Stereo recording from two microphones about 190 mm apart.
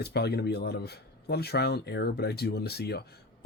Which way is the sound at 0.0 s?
60° left (ahead or behind).